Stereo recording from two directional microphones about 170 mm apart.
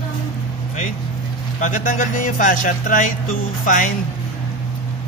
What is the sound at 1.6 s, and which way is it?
Speech, 50° left (ahead or behind).